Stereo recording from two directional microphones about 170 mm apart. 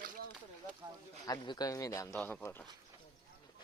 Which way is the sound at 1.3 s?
25° left (ahead or behind).